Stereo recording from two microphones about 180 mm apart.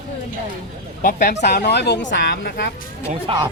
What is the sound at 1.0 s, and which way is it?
Speech, 50° left (ahead or behind).